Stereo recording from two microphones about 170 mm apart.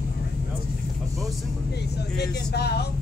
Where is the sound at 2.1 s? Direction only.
70° left (ahead or behind).